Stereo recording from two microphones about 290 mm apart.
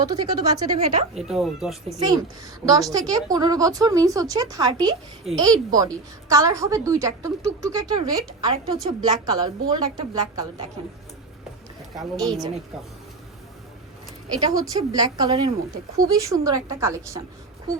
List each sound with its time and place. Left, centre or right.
0.0 s a woman's voice: centre
1.1 s speech: centre
2.7 s a woman's voice: centre
12.1 s a woman's voice: centre
14.3 s a woman's voice: centre